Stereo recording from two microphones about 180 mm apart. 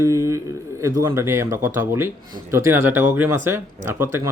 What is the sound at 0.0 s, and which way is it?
A man's voice, 15° right (ahead or behind).